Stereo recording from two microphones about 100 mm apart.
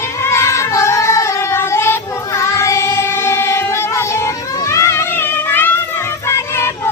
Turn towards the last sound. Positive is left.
turn(degrees=25)  # may be behind; listen again after turning